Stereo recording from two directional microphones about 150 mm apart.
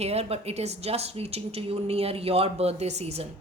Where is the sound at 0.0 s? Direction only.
45° right (ahead or behind).